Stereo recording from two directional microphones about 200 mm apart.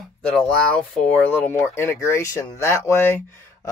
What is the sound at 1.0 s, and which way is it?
Speech, 10° left (ahead or behind).